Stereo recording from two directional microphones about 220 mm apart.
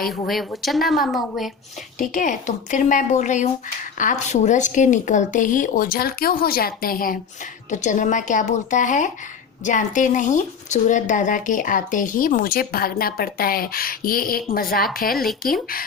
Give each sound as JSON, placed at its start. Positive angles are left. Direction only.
{"t": 0.1, "sound": "a woman's voice", "side_deg": 0}
{"t": 2.0, "sound": "speech", "side_deg": 35}